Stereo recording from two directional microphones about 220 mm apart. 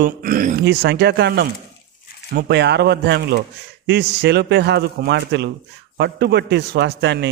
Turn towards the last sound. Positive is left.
turn(degrees=-50)  # may be behind; listen again after turning